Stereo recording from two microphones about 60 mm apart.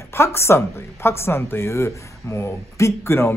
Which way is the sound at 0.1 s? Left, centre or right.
Left.